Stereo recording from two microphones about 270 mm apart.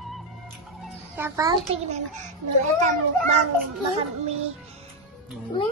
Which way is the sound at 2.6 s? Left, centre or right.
Right.